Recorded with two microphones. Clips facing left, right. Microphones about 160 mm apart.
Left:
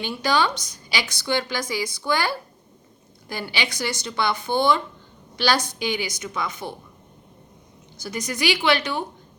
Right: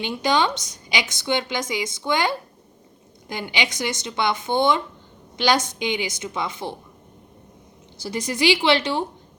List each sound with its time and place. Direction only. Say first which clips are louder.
0.0 s a woman's voice: right 1 dB; 20° right (ahead or behind)
7.9 s a woman's voice: right 3 dB; 30° right (ahead or behind)